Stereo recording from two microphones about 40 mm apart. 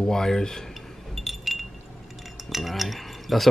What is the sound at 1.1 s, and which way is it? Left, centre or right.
Wind chime, centre.